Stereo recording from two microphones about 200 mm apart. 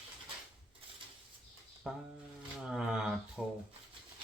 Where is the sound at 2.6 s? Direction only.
5° right (ahead or behind).